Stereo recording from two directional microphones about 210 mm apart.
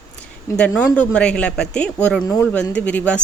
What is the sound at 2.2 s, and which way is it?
Speech, 15° left (ahead or behind).